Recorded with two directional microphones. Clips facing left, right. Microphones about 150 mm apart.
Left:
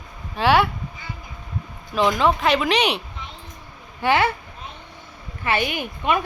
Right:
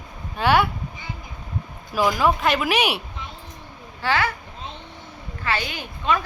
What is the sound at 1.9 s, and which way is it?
Speech, 5° right (ahead or behind).